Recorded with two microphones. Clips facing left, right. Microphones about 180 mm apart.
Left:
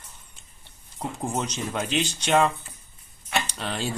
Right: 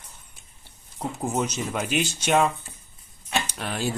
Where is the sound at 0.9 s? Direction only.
5° right (ahead or behind).